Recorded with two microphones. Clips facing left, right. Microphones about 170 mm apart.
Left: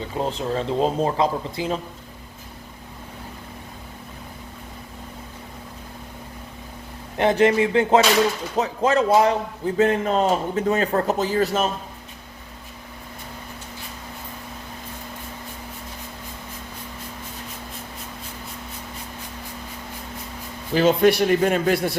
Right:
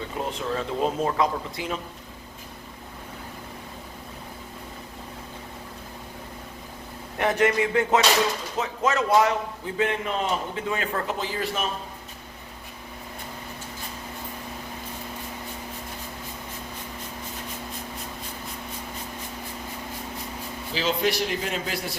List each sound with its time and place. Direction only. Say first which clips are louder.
0.2 s speech: left 4 dB; 30° left (ahead or behind)
7.2 s a sound: left 5 dB; 30° left (ahead or behind)
8.5 s speech: left 5 dB; 35° left (ahead or behind)
20.7 s a man's voice: left 9 dB; 55° left (ahead or behind)